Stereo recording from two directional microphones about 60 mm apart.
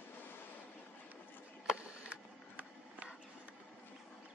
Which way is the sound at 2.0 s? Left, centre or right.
Right.